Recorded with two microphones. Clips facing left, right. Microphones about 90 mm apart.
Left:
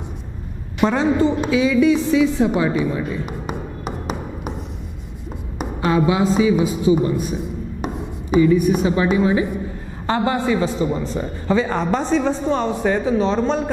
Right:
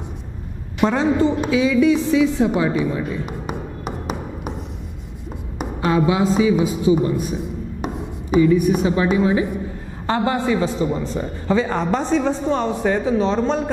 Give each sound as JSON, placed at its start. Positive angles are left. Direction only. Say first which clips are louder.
{"t": 0.7, "sound": "a woman's voice", "louder": "even", "side_deg": 20}
{"t": 5.6, "sound": "a man's voice", "louder": "even", "side_deg": 20}